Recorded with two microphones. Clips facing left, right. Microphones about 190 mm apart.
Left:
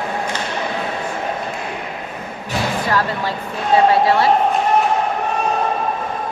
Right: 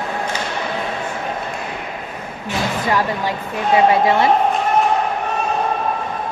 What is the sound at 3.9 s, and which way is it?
Speech, 20° right (ahead or behind).